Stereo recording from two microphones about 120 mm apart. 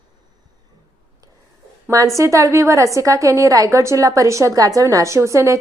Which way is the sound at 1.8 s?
25° right (ahead or behind).